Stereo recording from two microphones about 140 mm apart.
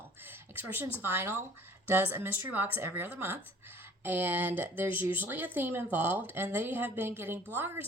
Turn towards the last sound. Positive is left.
turn(degrees=-15)  # may be behind; listen again after turning